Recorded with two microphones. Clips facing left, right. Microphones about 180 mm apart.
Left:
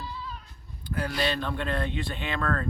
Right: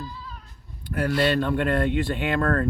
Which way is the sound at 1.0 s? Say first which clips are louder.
Right 7 dB; 55° right (ahead or behind).